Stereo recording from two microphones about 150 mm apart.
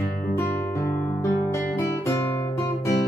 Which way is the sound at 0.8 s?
20° left (ahead or behind).